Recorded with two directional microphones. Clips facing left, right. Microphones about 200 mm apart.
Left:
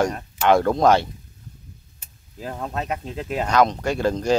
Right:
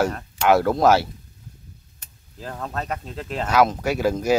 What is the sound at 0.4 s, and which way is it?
Speech, 5° right (ahead or behind).